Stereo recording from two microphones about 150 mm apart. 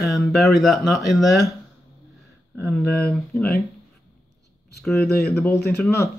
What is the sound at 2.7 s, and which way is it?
Speech, 10° left (ahead or behind).